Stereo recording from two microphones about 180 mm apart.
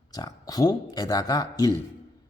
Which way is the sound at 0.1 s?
20° left (ahead or behind).